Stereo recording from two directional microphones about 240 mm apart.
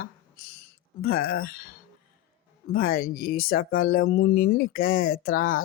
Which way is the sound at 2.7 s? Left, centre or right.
Left.